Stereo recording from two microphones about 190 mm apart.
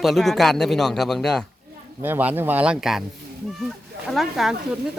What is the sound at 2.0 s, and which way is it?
Speech, 10° right (ahead or behind).